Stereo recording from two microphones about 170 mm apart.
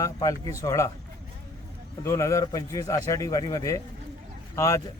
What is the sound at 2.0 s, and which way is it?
A man's voice, 15° left (ahead or behind).